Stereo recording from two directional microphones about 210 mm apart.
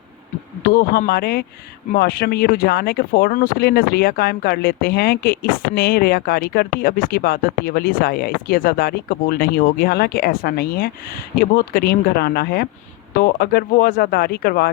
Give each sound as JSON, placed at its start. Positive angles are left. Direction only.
{"t": 0.7, "sound": "speech", "side_deg": 45}